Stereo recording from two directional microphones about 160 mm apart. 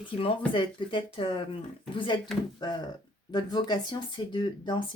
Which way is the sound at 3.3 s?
25° left (ahead or behind).